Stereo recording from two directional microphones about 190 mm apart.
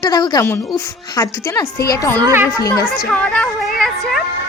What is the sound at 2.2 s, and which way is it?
Speech, 10° right (ahead or behind).